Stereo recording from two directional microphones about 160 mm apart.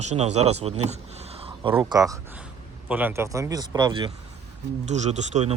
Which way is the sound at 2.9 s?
10° right (ahead or behind).